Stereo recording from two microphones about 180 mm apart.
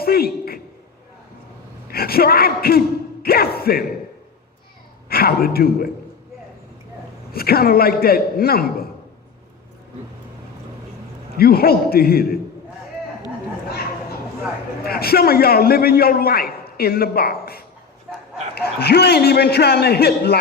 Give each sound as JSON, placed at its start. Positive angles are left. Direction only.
{"t": 0.0, "sound": "a man's voice", "side_deg": 55}
{"t": 1.9, "sound": "a man's voice", "side_deg": 60}
{"t": 5.0, "sound": "a man's voice", "side_deg": 55}
{"t": 7.3, "sound": "a man's voice", "side_deg": 55}
{"t": 11.3, "sound": "a man's voice", "side_deg": 55}
{"t": 14.8, "sound": "a man's voice", "side_deg": 60}